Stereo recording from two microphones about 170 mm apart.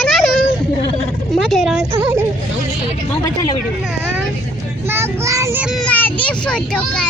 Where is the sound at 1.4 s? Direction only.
Centre (ahead or behind).